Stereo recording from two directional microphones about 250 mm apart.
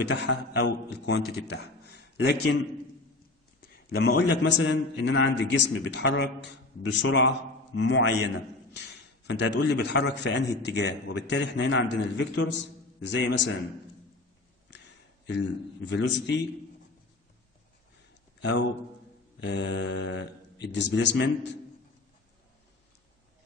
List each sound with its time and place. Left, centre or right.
0.1 s a man's voice: left
3.6 s a man's voice: left
15.2 s a man's voice: left
19.4 s a man's voice: left